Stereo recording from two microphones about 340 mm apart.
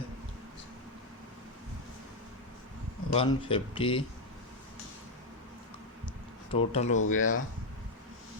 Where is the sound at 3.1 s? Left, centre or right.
Centre.